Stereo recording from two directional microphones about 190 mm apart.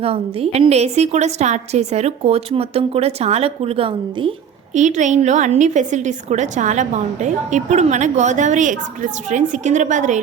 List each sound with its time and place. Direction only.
0.0 s a woman's voice: 30° right (ahead or behind)